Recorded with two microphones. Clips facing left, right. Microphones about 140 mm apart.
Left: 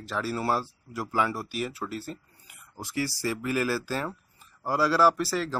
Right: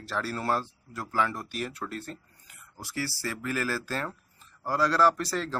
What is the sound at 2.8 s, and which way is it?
Speech, 15° left (ahead or behind).